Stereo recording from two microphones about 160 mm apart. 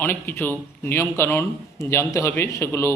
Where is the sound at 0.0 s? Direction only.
15° left (ahead or behind).